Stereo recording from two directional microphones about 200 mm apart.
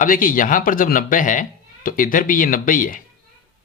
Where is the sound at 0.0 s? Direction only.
45° left (ahead or behind).